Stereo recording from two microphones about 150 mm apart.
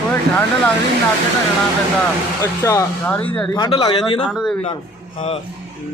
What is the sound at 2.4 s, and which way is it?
Speech, 20° left (ahead or behind).